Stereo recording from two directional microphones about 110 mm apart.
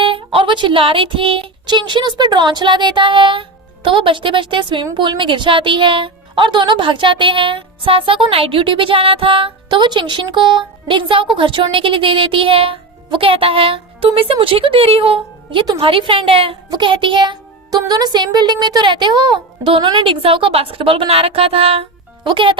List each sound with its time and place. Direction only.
0.0 s a woman's voice: 55° right (ahead or behind)
16.6 s a woman's voice: 45° right (ahead or behind)